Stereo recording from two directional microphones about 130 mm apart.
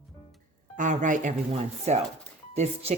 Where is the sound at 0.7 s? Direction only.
75° right (ahead or behind).